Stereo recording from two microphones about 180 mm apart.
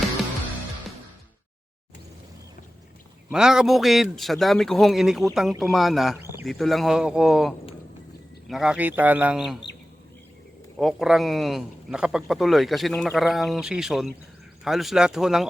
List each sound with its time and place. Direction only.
3.3 s a man's voice: 5° right (ahead or behind)
6.1 s a sound: 15° right (ahead or behind)
6.4 s a man's voice: centre (ahead or behind)
10.8 s a man's voice: centre (ahead or behind)